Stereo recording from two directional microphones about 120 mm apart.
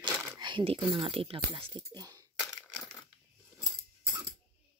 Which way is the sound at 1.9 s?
30° right (ahead or behind).